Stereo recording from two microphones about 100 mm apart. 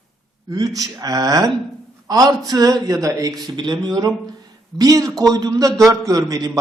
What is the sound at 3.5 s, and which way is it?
A woman's voice, 45° right (ahead or behind).